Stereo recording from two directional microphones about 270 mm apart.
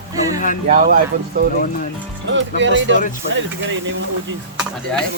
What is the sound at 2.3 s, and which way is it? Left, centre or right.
Speech, right.